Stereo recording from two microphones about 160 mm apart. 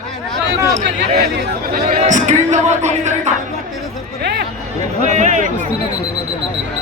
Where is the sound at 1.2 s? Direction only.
70° right (ahead or behind); by 3.3 s 45° right (ahead or behind).